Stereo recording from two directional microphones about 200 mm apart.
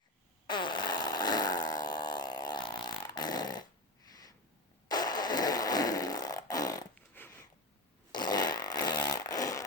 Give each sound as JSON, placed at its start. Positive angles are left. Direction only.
{"t": 0.4, "sound": "fart", "side_deg": 20}
{"t": 6.9, "sound": "a sound", "side_deg": 10}
{"t": 8.1, "sound": "fart", "side_deg": 20}